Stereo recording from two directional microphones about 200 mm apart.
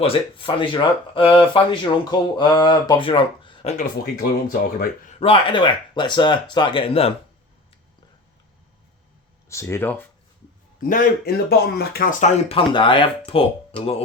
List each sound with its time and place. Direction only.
0.0 s speech: 25° left (ahead or behind)
4.0 s speech: 50° left (ahead or behind)
5.2 s speech: 25° left (ahead or behind)
9.5 s speech: 15° left (ahead or behind)
10.8 s speech: 45° left (ahead or behind)
12.2 s speech: 30° left (ahead or behind)